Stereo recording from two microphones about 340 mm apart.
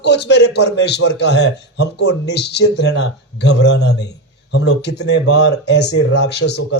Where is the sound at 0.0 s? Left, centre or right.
Left.